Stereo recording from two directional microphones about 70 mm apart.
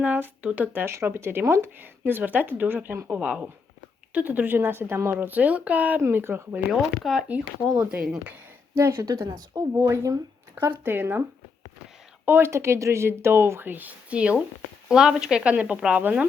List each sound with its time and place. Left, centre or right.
0.0 s speech: right
0.9 s speech: right
3.1 s speech: centre; by 5.1 s right
5.1 s speech: right
6.0 s speech: right
6.7 s speech: centre
8.7 s speech: right
9.0 s speech: right
10.8 s speech: right
12.2 s speech: right
12.5 s speech: right